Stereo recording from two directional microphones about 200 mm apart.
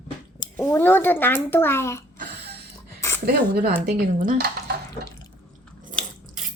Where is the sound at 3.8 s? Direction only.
45° right (ahead or behind).